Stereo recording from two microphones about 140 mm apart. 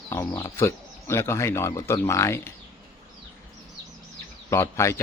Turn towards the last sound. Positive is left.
turn(degrees=20)  # may be behind; listen again after turning